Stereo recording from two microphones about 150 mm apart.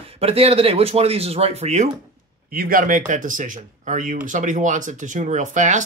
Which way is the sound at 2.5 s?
75° right (ahead or behind).